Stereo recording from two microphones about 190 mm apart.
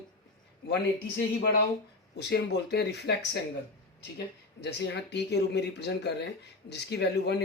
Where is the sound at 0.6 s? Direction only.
65° left (ahead or behind).